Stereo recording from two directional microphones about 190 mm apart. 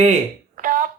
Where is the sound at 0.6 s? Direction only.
45° right (ahead or behind).